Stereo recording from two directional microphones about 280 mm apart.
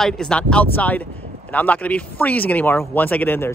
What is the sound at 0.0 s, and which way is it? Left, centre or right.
A man's voice, centre.